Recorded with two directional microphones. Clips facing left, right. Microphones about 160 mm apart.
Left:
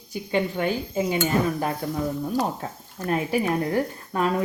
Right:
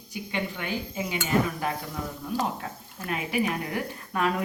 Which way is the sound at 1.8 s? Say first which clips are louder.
Left 10 dB; 40° left (ahead or behind).